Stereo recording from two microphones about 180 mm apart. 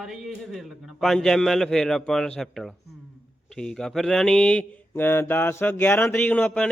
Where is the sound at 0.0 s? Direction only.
Centre (ahead or behind).